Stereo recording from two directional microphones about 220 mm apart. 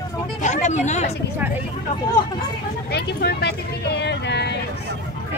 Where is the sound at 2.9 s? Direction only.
50° left (ahead or behind).